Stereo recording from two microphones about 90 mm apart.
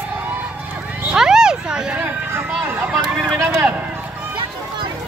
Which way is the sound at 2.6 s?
25° right (ahead or behind).